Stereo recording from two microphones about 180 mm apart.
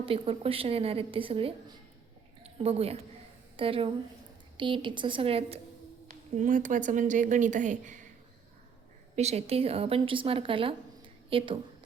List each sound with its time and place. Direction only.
0.0 s a woman's voice: 30° right (ahead or behind)
9.1 s a woman's voice: 35° right (ahead or behind)